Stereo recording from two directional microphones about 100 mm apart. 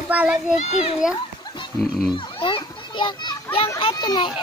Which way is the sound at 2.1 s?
50° left (ahead or behind).